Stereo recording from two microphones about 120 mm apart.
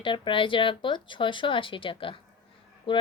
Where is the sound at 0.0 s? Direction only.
45° left (ahead or behind).